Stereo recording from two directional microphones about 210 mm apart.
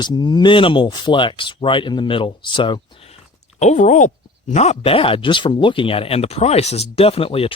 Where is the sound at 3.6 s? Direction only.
35° left (ahead or behind).